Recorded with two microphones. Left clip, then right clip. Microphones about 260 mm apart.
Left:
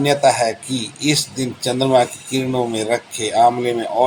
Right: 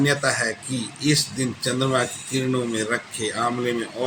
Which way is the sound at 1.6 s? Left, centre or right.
Centre.